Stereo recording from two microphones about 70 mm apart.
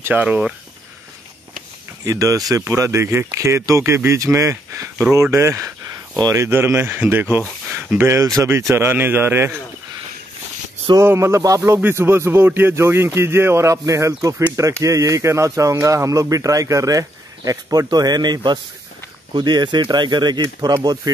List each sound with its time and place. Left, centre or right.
0.0 s speech: right
2.0 s speech: right
7.7 s a sound: right
8.2 s speech: right
8.5 s speech: right
11.1 s speech: right
11.8 s speech: right
17.8 s speech: right